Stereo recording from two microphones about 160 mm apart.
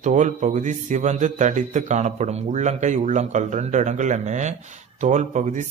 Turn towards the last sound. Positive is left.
turn(degrees=-50)  # may be behind; listen again after turning